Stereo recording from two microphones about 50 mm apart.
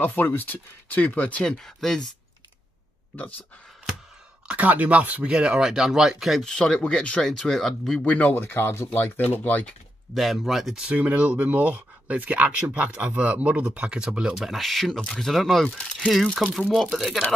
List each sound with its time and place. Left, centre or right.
0.0 s speech: left
1.6 s speech: centre
4.5 s speech: right
5.3 s speech: centre
6.4 s speech: centre
8.0 s speech: left
8.4 s speech: left
9.4 s speech: left
10.1 s speech: centre
10.9 s speech: right
14.3 s speech: centre